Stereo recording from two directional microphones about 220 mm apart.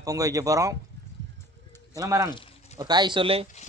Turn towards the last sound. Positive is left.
turn(degrees=-25)  # may be behind; listen again after turning